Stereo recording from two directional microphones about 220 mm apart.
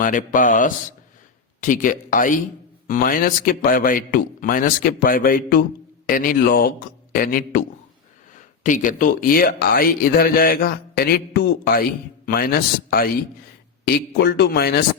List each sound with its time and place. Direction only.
0.0 s a man's voice: 35° left (ahead or behind)
8.6 s a man's voice: 35° left (ahead or behind)